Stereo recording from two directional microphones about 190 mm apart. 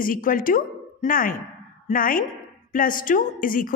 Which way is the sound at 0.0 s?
45° left (ahead or behind).